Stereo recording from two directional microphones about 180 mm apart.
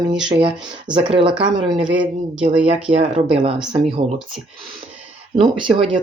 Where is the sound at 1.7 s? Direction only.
5° right (ahead or behind).